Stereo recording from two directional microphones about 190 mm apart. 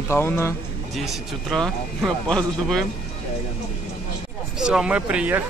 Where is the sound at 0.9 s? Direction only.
Centre (ahead or behind).